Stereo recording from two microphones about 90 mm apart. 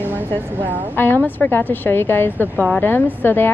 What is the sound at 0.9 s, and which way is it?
Speech, 25° left (ahead or behind).